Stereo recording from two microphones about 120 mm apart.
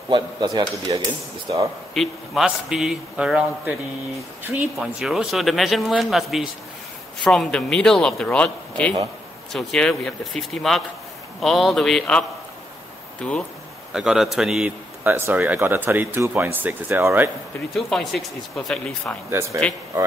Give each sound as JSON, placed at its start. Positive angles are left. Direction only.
{"t": 0.1, "sound": "speech", "side_deg": -35}
{"t": 2.0, "sound": "a man's voice", "side_deg": -5}
{"t": 4.7, "sound": "a man's voice", "side_deg": 0}
{"t": 13.9, "sound": "a man's voice", "side_deg": -5}
{"t": 15.0, "sound": "speech", "side_deg": -20}
{"t": 17.7, "sound": "a man's voice", "side_deg": 0}
{"t": 19.4, "sound": "speech", "side_deg": -20}